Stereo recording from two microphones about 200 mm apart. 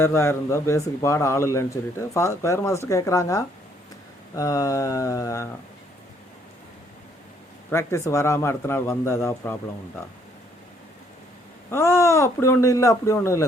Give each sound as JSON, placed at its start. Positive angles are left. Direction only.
{"t": 0.0, "sound": "speech", "side_deg": 15}
{"t": 7.7, "sound": "speech", "side_deg": 15}
{"t": 11.7, "sound": "speech", "side_deg": 15}